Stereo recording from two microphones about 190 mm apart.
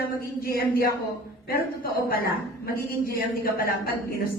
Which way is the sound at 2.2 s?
50° left (ahead or behind).